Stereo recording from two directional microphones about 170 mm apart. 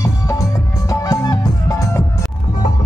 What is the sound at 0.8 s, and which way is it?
Music, 20° left (ahead or behind).